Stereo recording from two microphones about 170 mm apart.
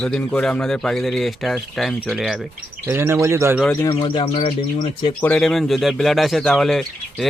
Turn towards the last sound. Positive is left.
turn(degrees=0)  # may be behind; listen again after turning